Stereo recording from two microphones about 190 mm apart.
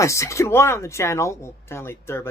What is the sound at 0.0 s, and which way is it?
Speech, 15° left (ahead or behind).